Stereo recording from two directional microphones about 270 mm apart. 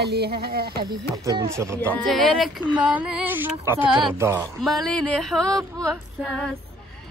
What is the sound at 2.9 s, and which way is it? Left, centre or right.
Music, centre.